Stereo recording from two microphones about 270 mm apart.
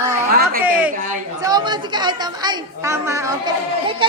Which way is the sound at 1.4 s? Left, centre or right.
Centre.